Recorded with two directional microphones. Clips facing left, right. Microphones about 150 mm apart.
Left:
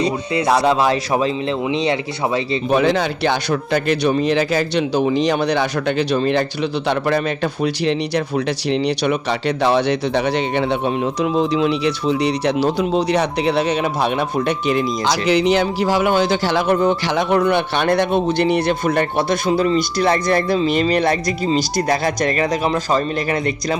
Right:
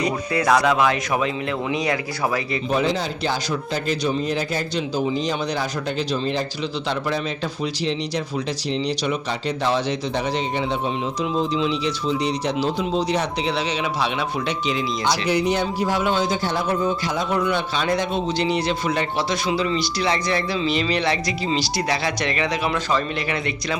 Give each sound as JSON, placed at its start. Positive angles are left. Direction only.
{"t": 0.0, "sound": "speech", "side_deg": 30}
{"t": 2.6, "sound": "a man's voice", "side_deg": 65}
{"t": 15.0, "sound": "a man's voice", "side_deg": 90}